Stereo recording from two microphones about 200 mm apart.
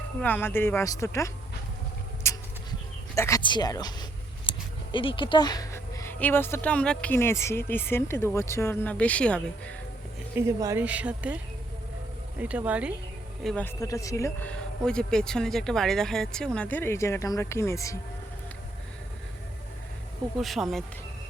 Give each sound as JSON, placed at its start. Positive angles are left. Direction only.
{"t": 0.2, "sound": "speech", "side_deg": 10}
{"t": 2.3, "sound": "insect", "side_deg": 15}
{"t": 3.2, "sound": "speech", "side_deg": 15}
{"t": 10.3, "sound": "speech", "side_deg": -15}
{"t": 12.4, "sound": "speech", "side_deg": -5}
{"t": 13.7, "sound": "speech", "side_deg": 15}
{"t": 20.4, "sound": "speech", "side_deg": 0}